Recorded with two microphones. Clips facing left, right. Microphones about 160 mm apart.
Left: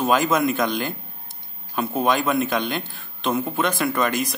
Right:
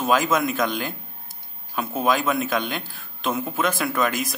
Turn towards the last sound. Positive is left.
turn(degrees=0)  # may be behind; listen again after turning